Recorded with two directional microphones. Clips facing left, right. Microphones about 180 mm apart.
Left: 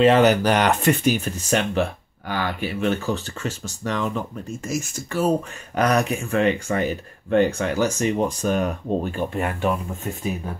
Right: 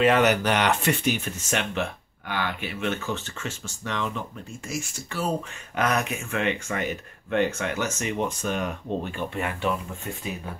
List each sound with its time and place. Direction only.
0.0 s speech: 30° left (ahead or behind)